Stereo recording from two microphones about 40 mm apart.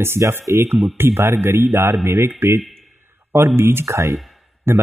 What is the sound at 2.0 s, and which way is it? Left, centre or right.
Speech, right.